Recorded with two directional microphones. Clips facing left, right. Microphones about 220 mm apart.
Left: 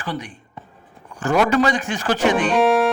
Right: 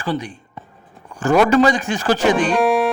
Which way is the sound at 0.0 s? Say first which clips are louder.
Right 5 dB; 25° right (ahead or behind).